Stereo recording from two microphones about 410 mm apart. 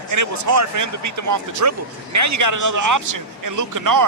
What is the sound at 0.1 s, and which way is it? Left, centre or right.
Speech, right.